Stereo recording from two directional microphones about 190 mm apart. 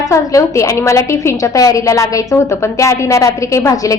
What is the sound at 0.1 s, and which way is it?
A woman's voice, 15° left (ahead or behind).